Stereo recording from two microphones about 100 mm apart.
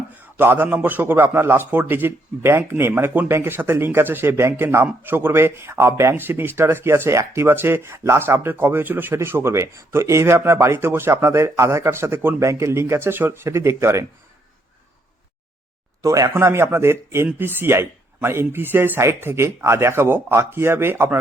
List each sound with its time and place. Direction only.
0.2 s a man's voice: 20° right (ahead or behind)
16.0 s a man's voice: 35° right (ahead or behind)